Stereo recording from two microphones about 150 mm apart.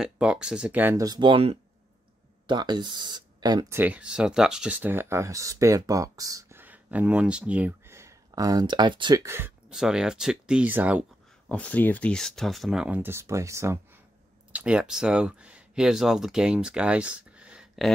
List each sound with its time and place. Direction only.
0.0 s speech: 5° right (ahead or behind)
1.0 s speech: 30° right (ahead or behind)
3.7 s speech: 10° right (ahead or behind)
6.6 s speech: 10° right (ahead or behind); by 9.2 s 30° right (ahead or behind)
9.2 s speech: 15° right (ahead or behind)
9.7 s speech: 5° right (ahead or behind)
11.4 s speech: 10° left (ahead or behind); by 13.7 s 20° right (ahead or behind)
14.5 s speech: 5° right (ahead or behind)